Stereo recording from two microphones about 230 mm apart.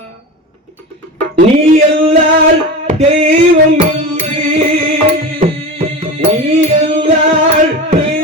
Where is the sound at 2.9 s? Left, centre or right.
Right.